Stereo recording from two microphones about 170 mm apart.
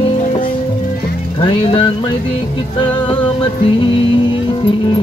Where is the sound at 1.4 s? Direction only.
30° left (ahead or behind).